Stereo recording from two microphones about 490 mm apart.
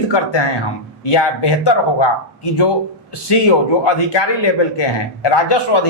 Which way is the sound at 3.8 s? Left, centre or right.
Left.